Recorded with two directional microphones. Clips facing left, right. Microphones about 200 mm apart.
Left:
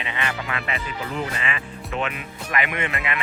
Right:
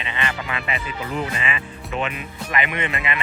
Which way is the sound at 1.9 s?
5° right (ahead or behind).